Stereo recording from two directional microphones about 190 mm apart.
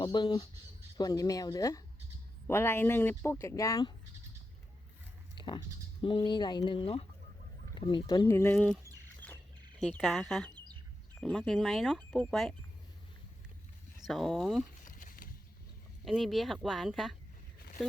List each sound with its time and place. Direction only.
0.0 s speech: 25° left (ahead or behind)
5.3 s a sound: 25° left (ahead or behind)
6.0 s speech: 25° left (ahead or behind); by 8.8 s 5° left (ahead or behind)
9.2 s bird: 10° left (ahead or behind)
10.0 s speech: centre (ahead or behind)
14.1 s speech: centre (ahead or behind)
14.8 s a sound: 45° left (ahead or behind)
16.0 s speech: centre (ahead or behind)